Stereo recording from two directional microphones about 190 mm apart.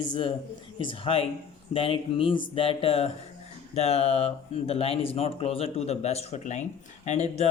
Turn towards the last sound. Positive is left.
turn(degrees=35)  # may be behind; listen again after turning